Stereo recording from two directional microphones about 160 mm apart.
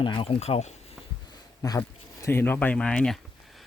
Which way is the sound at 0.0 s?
30° left (ahead or behind).